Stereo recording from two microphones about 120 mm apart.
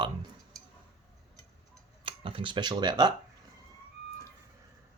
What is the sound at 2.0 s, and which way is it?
Speech, 45° right (ahead or behind).